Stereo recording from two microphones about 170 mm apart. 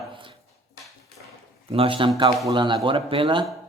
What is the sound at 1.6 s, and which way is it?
A man's voice, 35° right (ahead or behind).